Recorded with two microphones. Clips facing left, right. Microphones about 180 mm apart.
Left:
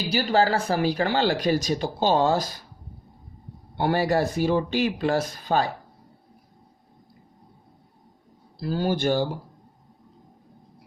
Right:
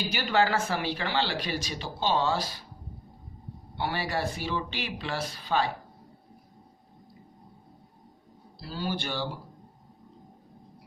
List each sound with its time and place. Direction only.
0.1 s speech: 35° left (ahead or behind)
3.8 s speech: 45° left (ahead or behind)
8.5 s speech: 50° left (ahead or behind)